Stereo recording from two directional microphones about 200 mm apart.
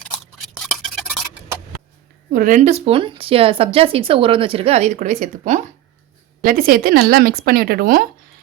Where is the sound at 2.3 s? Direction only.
40° right (ahead or behind).